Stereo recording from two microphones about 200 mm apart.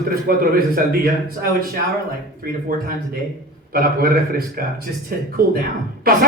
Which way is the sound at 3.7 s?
50° right (ahead or behind).